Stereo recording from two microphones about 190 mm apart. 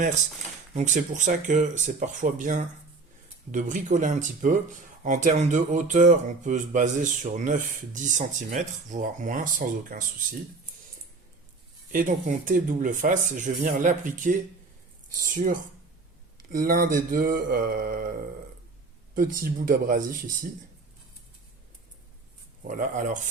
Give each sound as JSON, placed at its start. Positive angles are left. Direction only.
{"t": 0.7, "sound": "speech", "side_deg": -40}
{"t": 11.9, "sound": "speech", "side_deg": -45}
{"t": 22.6, "sound": "speech", "side_deg": -45}